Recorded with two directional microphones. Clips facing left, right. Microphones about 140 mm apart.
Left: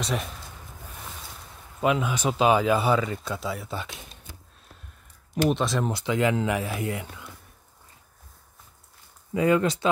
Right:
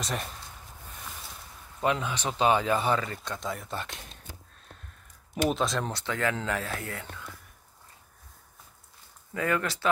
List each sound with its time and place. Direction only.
0.0 s speech: centre (ahead or behind)
1.8 s speech: 10° left (ahead or behind)
5.3 s speech: centre (ahead or behind); by 7.2 s 15° left (ahead or behind)
9.3 s speech: 20° left (ahead or behind)